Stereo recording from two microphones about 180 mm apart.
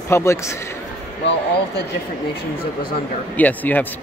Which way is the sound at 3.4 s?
10° left (ahead or behind).